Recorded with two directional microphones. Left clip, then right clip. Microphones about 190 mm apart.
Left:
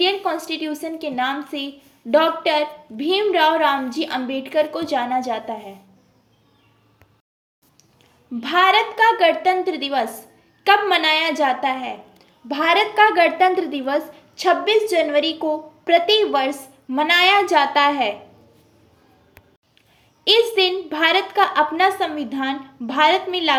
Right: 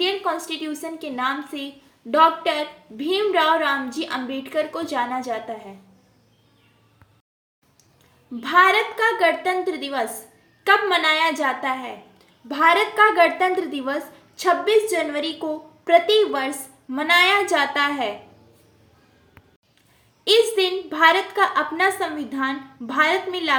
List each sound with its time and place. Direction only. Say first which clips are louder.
0.0 s a woman's voice: left 3 dB; 20° left (ahead or behind)
8.4 s a woman's voice: left 1 dB; 25° left (ahead or behind)
20.6 s a woman's voice: even; 20° left (ahead or behind)